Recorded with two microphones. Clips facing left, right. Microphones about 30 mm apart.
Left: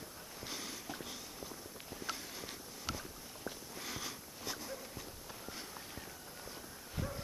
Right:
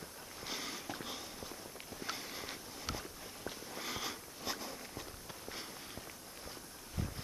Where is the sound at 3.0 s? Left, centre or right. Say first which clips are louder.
Right 1 dB; centre.